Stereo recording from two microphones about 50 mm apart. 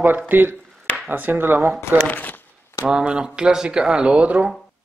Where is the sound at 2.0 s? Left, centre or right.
Left.